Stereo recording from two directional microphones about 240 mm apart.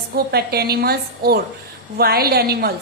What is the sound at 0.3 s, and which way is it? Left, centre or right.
A woman's voice, right.